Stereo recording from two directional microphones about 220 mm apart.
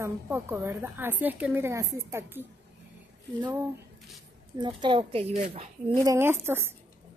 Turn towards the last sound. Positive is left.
turn(degrees=-10)  # may be behind; listen again after turning